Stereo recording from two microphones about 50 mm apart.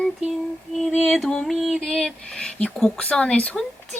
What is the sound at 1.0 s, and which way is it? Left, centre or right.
Speech, centre.